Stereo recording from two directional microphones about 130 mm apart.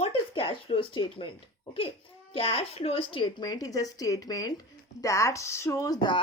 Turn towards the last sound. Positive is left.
turn(degrees=35)  # may be behind; listen again after turning